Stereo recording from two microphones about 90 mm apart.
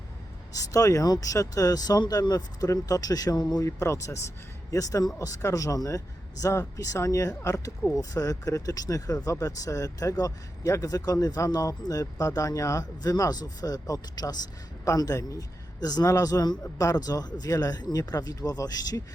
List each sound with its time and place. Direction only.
0.5 s speech: 40° left (ahead or behind)
3.7 s speech: 35° left (ahead or behind)